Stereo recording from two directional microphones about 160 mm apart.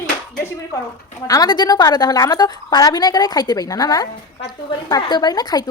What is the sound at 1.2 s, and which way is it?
A woman's voice, 25° left (ahead or behind).